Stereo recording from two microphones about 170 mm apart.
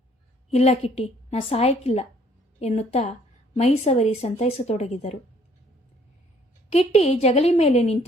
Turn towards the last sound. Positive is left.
turn(degrees=40)  # may be behind; listen again after turning